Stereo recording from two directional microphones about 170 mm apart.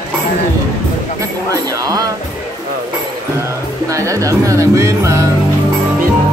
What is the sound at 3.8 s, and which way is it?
Speech, 20° right (ahead or behind).